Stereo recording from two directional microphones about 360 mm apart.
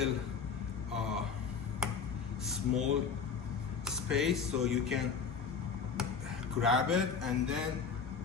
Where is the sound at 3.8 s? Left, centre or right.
Centre.